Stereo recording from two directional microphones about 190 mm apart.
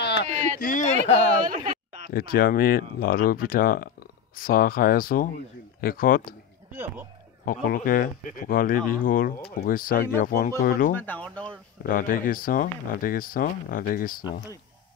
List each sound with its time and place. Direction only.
0.0 s a sound: 65° left (ahead or behind)
0.6 s speech: 45° left (ahead or behind)
2.0 s speech: 50° left (ahead or behind)
6.7 s speech: 10° right (ahead or behind)
7.4 s speech: 50° left (ahead or behind)
11.0 s speech: 10° left (ahead or behind)
11.8 s speech: 50° left (ahead or behind)